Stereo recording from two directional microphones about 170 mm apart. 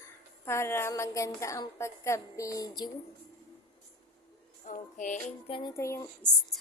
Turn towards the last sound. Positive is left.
turn(degrees=15)  # may be behind; listen again after turning